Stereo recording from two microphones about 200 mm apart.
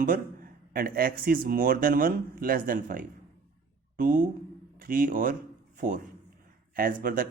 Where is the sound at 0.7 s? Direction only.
45° right (ahead or behind).